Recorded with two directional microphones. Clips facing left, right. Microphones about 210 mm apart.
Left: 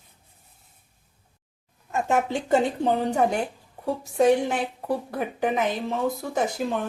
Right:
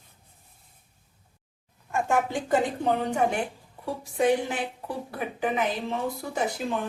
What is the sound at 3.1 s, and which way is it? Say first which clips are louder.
Speech: left 2 dB; 40° left (ahead or behind).